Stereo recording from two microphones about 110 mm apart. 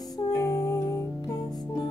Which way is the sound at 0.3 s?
30° left (ahead or behind).